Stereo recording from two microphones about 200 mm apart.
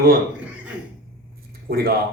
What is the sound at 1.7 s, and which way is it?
Speech, 50° right (ahead or behind).